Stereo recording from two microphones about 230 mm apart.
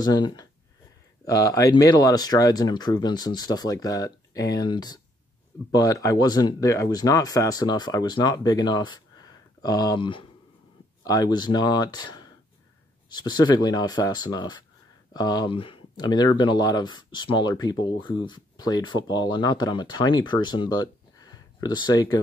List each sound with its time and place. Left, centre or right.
0.0 s speech: centre